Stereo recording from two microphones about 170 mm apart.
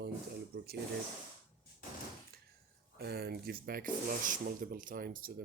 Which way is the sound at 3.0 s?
70° right (ahead or behind).